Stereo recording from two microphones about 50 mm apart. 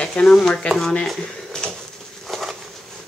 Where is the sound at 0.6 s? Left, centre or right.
Centre.